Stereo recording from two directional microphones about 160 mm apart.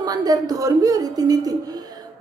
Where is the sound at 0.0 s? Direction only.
25° right (ahead or behind).